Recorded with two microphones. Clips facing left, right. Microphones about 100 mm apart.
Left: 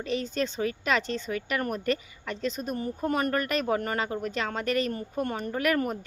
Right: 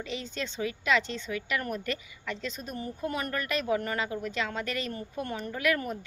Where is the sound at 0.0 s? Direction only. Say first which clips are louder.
Left 7 dB; 45° left (ahead or behind).